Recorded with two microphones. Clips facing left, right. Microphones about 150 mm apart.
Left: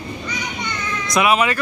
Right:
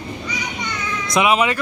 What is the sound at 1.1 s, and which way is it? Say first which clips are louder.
Speech: even; 20° right (ahead or behind).